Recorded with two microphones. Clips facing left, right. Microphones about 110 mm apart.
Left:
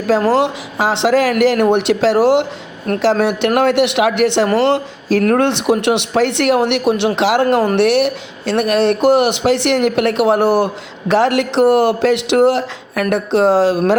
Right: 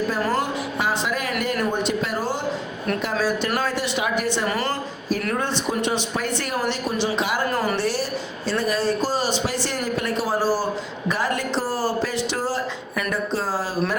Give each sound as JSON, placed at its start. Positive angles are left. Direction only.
{"t": 0.1, "sound": "a woman's voice", "side_deg": 80}
{"t": 7.2, "sound": "speech", "side_deg": 85}
{"t": 7.4, "sound": "a woman's voice", "side_deg": 55}
{"t": 11.1, "sound": "a woman's voice", "side_deg": 80}